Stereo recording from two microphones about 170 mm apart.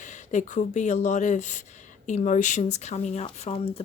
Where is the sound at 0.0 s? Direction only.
45° left (ahead or behind).